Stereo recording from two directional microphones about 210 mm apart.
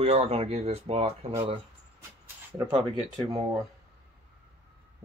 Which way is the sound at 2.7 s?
25° right (ahead or behind).